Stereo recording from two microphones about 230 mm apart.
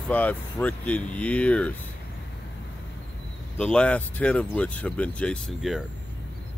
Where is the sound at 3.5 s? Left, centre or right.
Centre.